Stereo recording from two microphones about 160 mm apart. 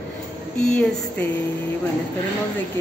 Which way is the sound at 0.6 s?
5° left (ahead or behind).